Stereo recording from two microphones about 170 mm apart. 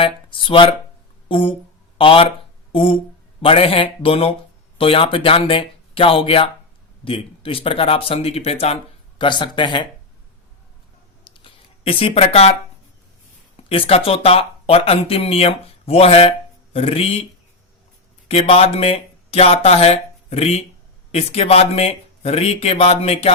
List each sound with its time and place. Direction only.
0.0 s speech: 30° left (ahead or behind)
11.2 s a sound: 30° left (ahead or behind)
13.7 s speech: 35° left (ahead or behind)
18.3 s speech: 35° left (ahead or behind)